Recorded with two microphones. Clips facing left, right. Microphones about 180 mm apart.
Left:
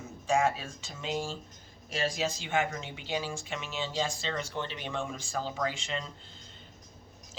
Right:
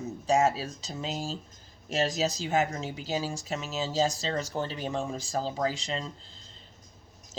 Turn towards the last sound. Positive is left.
turn(degrees=-35)  # may be behind; listen again after turning